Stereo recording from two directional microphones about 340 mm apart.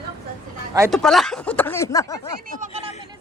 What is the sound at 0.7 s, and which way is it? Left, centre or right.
Speech, centre.